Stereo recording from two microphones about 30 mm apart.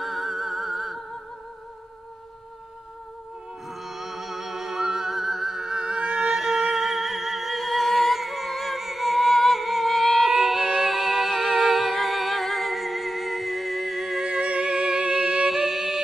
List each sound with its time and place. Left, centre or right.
0.0 s music: centre
3.6 s music: centre
10.2 s music: centre
14.3 s music: right